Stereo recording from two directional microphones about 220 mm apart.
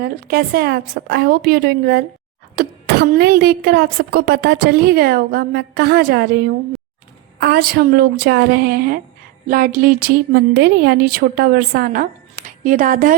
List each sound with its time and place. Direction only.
0.0 s a woman's voice: 45° right (ahead or behind)
7.3 s a woman's voice: 45° right (ahead or behind)